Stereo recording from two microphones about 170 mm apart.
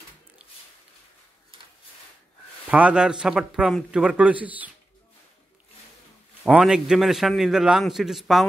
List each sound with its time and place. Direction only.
2.7 s a man's voice: 5° right (ahead or behind)
6.4 s a man's voice: 5° right (ahead or behind)